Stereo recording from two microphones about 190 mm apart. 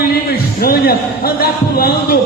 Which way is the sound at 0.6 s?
50° left (ahead or behind).